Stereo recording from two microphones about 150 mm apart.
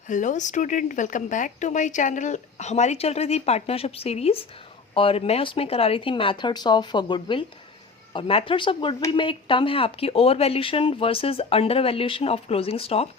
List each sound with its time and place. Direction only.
0.1 s a woman's voice: 55° left (ahead or behind); by 13.1 s 40° left (ahead or behind)